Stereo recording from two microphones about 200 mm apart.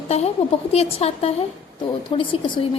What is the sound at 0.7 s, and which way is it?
A woman's voice, 30° left (ahead or behind).